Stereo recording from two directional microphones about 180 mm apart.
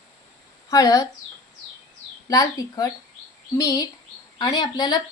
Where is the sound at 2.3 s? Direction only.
20° left (ahead or behind).